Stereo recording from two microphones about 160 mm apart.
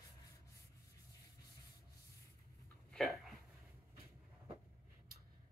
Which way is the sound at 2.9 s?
Centre (ahead or behind).